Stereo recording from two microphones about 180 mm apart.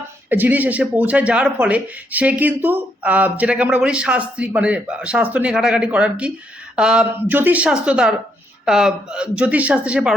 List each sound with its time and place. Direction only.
0.3 s a woman's voice: 10° right (ahead or behind)